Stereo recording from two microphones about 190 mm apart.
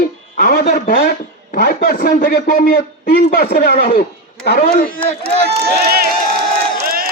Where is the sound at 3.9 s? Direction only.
55° left (ahead or behind).